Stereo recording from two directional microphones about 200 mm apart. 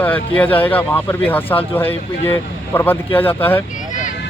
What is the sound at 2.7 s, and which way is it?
Speech, 10° left (ahead or behind).